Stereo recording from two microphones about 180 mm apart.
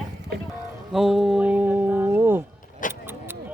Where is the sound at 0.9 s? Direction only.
Centre (ahead or behind).